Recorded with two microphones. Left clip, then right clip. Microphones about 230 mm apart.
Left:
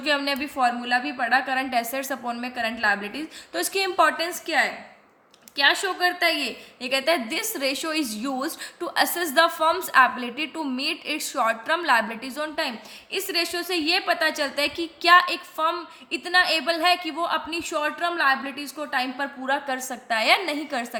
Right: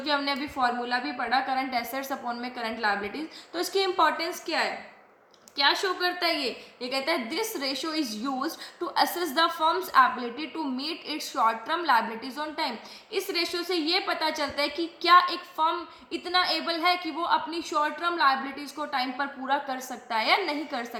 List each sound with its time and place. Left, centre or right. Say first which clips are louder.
0.0 s a woman's voice: left 3 dB; left